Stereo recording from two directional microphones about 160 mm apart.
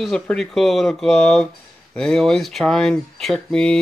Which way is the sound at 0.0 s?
5° left (ahead or behind).